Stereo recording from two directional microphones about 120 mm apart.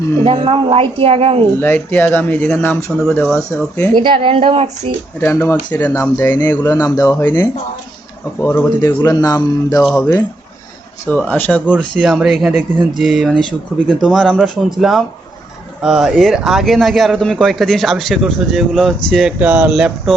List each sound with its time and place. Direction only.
0.3 s a woman's voice: 55° right (ahead or behind)
1.5 s speech: 15° left (ahead or behind)
3.0 s speech: centre (ahead or behind)
3.9 s a woman's voice: 45° right (ahead or behind)
5.2 s speech: 20° left (ahead or behind)
8.4 s speech: 15° left (ahead or behind)
9.8 s speech: 5° left (ahead or behind)
11.1 s speech: 10° left (ahead or behind)
12.5 s speech: 15° right (ahead or behind)
13.0 s speech: centre (ahead or behind)
19.4 s speech: 15° right (ahead or behind)
19.7 s speech: centre (ahead or behind)